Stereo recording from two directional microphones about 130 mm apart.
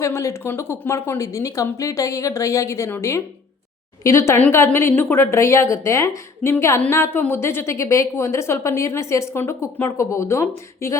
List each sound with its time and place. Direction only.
0.0 s a woman's voice: 20° left (ahead or behind)